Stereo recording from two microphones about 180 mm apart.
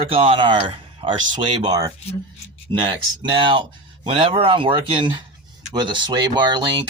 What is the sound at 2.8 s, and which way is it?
Speech, 25° right (ahead or behind).